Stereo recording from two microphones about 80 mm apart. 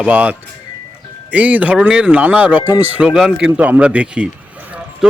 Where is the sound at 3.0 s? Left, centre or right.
Centre.